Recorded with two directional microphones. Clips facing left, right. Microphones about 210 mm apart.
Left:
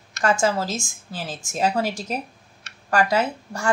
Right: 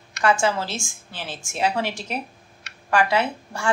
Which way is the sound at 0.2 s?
40° left (ahead or behind).